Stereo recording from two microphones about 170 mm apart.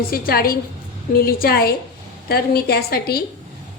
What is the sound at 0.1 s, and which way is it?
A woman's voice, 60° left (ahead or behind).